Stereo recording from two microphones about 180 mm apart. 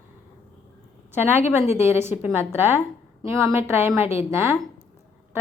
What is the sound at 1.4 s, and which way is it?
Speech, 40° left (ahead or behind).